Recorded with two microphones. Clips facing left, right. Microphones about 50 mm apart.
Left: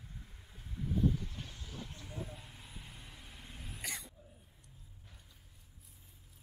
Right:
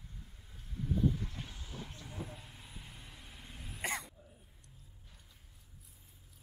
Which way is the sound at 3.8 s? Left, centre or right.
Right.